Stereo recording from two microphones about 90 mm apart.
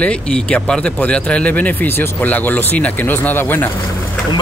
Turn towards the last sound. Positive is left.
turn(degrees=25)  # may be behind; listen again after turning